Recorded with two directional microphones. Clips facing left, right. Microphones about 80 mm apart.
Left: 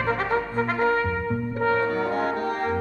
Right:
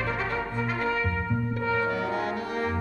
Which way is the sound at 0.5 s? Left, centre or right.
Left.